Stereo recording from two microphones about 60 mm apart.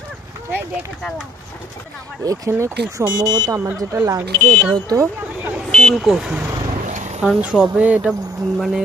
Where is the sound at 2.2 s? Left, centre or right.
Right.